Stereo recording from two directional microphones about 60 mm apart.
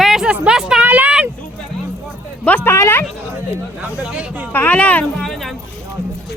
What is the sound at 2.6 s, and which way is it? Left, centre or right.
Speech, left.